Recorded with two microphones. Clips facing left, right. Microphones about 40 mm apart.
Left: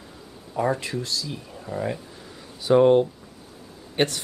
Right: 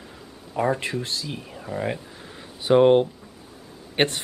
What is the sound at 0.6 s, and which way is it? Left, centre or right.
Speech, right.